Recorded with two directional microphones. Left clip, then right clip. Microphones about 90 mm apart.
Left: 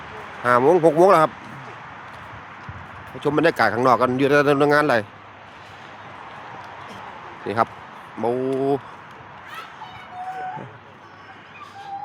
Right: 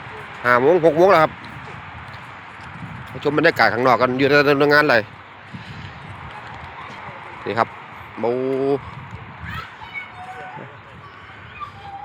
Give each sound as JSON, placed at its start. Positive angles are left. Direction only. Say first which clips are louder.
{"t": 0.4, "sound": "speech", "louder": "right 1 dB", "side_deg": 20}
{"t": 3.2, "sound": "speech", "louder": "right 2 dB", "side_deg": 20}
{"t": 7.4, "sound": "a man's voice", "louder": "right 1 dB", "side_deg": 20}